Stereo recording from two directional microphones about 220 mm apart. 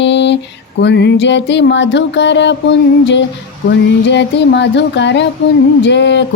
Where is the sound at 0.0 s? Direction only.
50° left (ahead or behind).